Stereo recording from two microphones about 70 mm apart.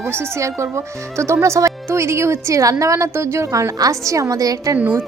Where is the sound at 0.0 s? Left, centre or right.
Right.